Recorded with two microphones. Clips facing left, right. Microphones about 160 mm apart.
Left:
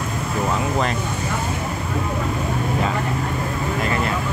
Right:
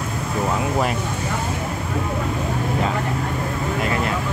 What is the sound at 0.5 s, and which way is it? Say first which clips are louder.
Speech: right 1 dB; 10° right (ahead or behind).